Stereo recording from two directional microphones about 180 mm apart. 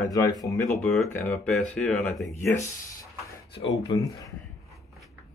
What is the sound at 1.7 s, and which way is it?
Speech, 5° left (ahead or behind).